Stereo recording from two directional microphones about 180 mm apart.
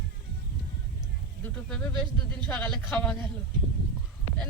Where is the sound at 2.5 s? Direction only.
5° left (ahead or behind).